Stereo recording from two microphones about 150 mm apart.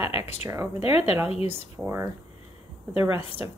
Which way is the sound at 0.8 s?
40° left (ahead or behind).